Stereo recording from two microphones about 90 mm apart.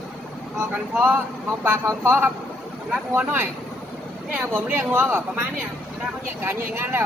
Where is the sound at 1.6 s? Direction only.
25° right (ahead or behind).